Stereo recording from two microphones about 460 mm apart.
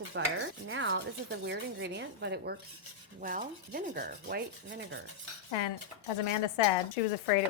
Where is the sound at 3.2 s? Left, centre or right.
Centre.